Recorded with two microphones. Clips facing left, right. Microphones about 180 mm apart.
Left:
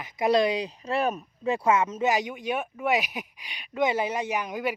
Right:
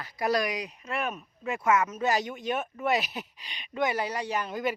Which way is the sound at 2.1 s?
15° left (ahead or behind).